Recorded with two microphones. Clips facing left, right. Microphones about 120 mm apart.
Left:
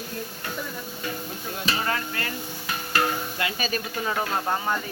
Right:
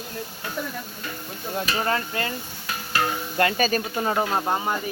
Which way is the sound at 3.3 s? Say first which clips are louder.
Right 7 dB; 45° right (ahead or behind).